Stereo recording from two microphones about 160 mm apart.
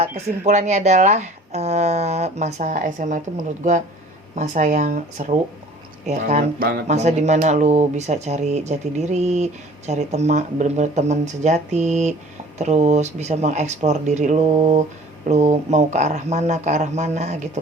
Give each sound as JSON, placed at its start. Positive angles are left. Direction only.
{"t": 0.0, "sound": "speech", "side_deg": -45}
{"t": 6.6, "sound": "speech", "side_deg": -70}
{"t": 6.8, "sound": "speech", "side_deg": -45}